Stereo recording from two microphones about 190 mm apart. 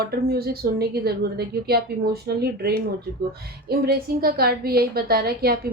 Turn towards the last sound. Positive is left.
turn(degrees=-55)  # may be behind; listen again after turning